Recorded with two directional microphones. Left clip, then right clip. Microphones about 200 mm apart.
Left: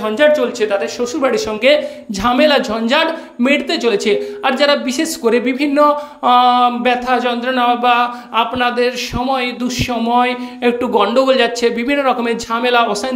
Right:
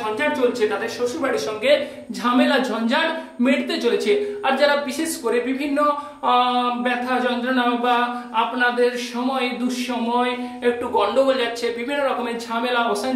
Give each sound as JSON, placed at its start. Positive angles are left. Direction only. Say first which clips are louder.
{"t": 0.2, "sound": "speech", "louder": "left 8 dB", "side_deg": 50}
{"t": 10.1, "sound": "speech", "louder": "left 7 dB", "side_deg": 45}